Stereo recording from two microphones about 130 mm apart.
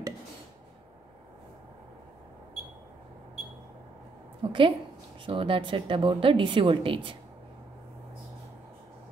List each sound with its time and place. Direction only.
4.4 s a woman's voice: 40° right (ahead or behind)